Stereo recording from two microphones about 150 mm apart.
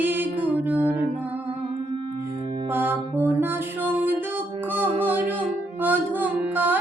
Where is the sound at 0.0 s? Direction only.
15° right (ahead or behind).